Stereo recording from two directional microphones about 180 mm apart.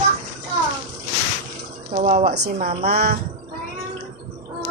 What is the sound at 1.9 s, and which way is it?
Speech, 40° right (ahead or behind).